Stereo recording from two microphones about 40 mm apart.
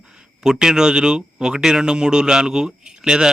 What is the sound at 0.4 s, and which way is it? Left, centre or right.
Speech, centre.